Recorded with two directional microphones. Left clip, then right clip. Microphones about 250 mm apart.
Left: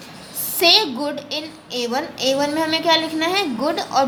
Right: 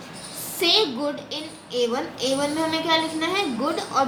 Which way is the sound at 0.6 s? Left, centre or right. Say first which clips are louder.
Left 5 dB; left.